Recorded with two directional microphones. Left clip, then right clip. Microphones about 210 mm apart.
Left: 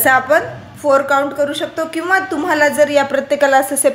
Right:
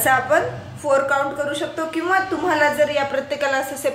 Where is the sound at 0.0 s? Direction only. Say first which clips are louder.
Left 5 dB; 50° left (ahead or behind).